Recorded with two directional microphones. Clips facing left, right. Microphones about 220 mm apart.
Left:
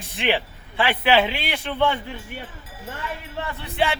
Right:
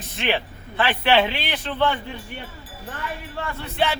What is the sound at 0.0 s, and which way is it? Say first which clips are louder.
Speech: left 1 dB; 15° left (ahead or behind).